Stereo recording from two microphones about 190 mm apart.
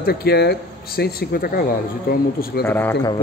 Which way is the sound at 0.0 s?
55° left (ahead or behind).